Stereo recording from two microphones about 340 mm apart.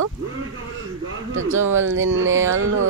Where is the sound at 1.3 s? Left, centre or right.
Right.